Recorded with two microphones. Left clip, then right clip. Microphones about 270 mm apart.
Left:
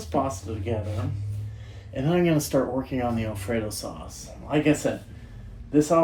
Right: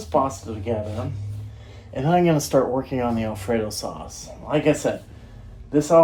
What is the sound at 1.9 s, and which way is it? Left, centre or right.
Speech, right.